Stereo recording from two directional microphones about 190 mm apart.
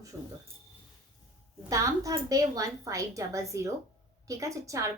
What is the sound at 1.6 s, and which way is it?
A woman's voice, 15° right (ahead or behind).